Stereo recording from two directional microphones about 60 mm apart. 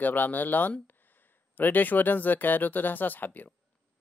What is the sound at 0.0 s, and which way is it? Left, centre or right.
A man's voice, left.